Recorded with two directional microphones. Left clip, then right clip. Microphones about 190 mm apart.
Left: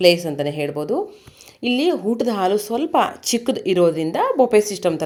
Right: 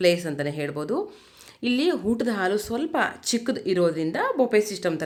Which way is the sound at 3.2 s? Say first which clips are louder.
Left 5 dB; 30° right (ahead or behind).